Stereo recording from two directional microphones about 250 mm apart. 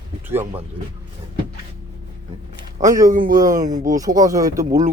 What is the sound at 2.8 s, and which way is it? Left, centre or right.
Speech, centre.